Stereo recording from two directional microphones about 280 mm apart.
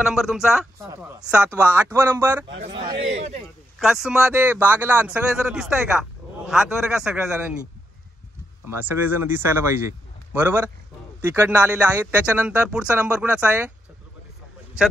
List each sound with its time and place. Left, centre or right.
0.0 s a man's voice: centre; by 3.4 s right
3.8 s speech: centre
8.6 s speech: centre